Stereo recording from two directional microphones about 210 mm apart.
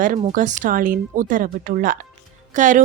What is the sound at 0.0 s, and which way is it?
A woman's voice, 40° right (ahead or behind).